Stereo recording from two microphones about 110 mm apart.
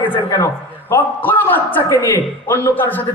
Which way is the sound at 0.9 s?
20° left (ahead or behind).